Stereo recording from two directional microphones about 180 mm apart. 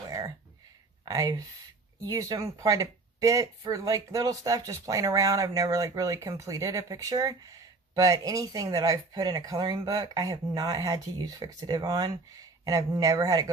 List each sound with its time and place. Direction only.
1.0 s speech: 20° right (ahead or behind)